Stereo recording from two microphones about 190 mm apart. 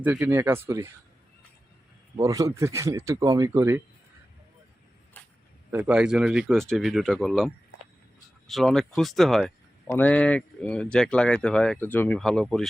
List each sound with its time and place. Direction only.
0.0 s speech: 10° right (ahead or behind)
2.1 s speech: 15° right (ahead or behind)
5.2 s a sound: 10° left (ahead or behind)
5.7 s speech: 5° right (ahead or behind)